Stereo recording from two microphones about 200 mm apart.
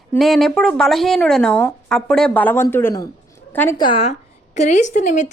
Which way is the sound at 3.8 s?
25° left (ahead or behind).